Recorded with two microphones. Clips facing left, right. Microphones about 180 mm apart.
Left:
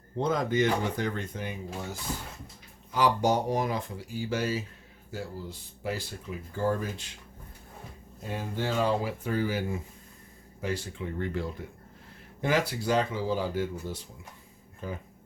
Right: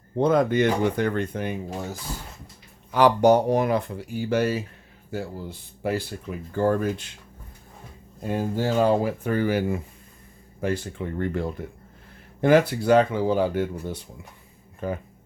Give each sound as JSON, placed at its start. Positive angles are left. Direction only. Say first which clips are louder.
{"t": 0.2, "sound": "speech", "louder": "right 7 dB", "side_deg": -60}
{"t": 2.9, "sound": "speech", "louder": "right 8 dB", "side_deg": -65}
{"t": 8.3, "sound": "speech", "louder": "right 7 dB", "side_deg": -45}
{"t": 10.6, "sound": "speech", "louder": "right 6 dB", "side_deg": -55}